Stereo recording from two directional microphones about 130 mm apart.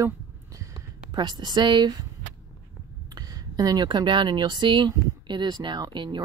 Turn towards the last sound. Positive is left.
turn(degrees=-35)  # may be behind; listen again after turning